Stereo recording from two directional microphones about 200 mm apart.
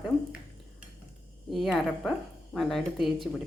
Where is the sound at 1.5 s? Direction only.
Centre (ahead or behind).